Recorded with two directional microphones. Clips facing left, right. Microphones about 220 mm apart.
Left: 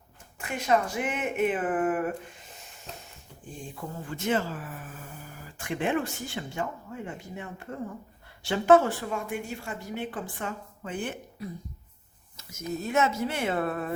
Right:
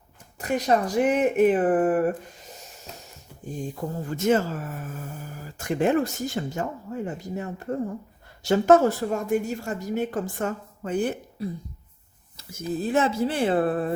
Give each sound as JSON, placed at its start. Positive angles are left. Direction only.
{"t": 0.3, "sound": "speech", "side_deg": -40}
{"t": 3.6, "sound": "speech", "side_deg": -40}